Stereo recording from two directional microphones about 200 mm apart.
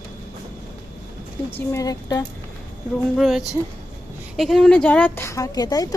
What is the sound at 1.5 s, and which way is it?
Speech, 15° left (ahead or behind).